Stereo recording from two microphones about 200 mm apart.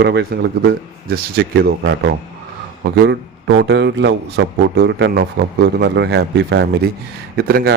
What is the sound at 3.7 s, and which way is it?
Speech, 60° right (ahead or behind).